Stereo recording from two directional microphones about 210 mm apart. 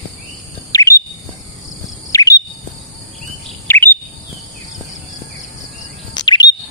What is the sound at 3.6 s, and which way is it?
Chirp, 10° left (ahead or behind).